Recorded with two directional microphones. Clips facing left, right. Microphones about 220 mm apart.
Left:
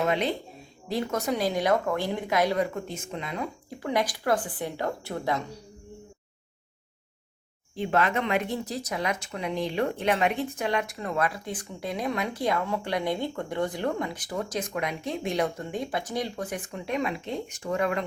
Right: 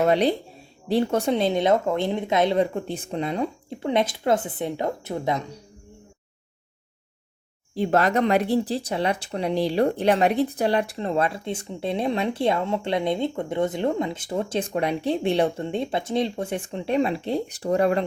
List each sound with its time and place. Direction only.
0.0 s speech: 35° right (ahead or behind)
7.8 s speech: 40° right (ahead or behind)